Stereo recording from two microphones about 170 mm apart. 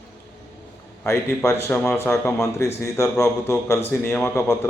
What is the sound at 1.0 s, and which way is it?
A man's voice, 15° left (ahead or behind).